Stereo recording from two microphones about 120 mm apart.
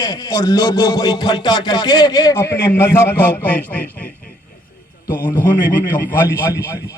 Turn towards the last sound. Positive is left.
turn(degrees=25)  # may be behind; listen again after turning